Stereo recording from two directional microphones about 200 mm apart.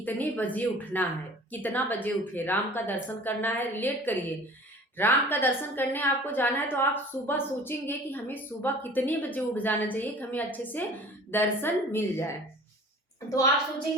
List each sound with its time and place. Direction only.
0.0 s a woman's voice: 10° left (ahead or behind)